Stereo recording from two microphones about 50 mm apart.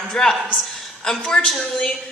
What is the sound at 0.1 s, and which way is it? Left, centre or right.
A woman's voice, centre.